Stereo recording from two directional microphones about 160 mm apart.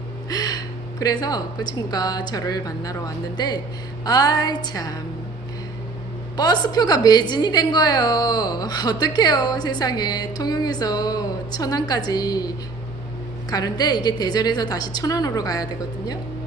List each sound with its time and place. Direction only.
0.3 s a woman's voice: 25° left (ahead or behind)
6.3 s a woman's voice: 25° left (ahead or behind)
13.5 s a woman's voice: 25° left (ahead or behind)